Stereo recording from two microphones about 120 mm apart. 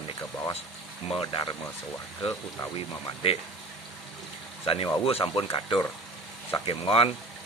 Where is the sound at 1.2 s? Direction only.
45° left (ahead or behind).